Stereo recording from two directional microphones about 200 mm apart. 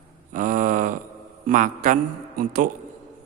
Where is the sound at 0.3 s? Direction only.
40° right (ahead or behind).